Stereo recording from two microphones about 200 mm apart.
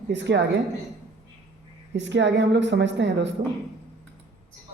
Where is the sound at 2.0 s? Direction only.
60° right (ahead or behind).